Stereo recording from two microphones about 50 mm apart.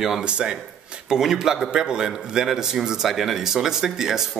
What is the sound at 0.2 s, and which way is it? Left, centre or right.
Speech, centre.